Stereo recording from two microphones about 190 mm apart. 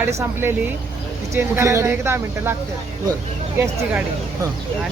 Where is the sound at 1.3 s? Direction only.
15° right (ahead or behind).